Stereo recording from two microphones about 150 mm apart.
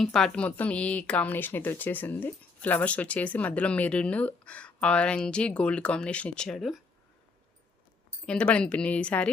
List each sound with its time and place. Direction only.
0.0 s speech: 5° left (ahead or behind)
8.3 s speech: 5° left (ahead or behind)